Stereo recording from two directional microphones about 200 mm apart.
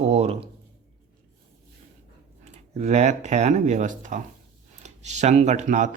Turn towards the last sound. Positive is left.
turn(degrees=-40)  # may be behind; listen again after turning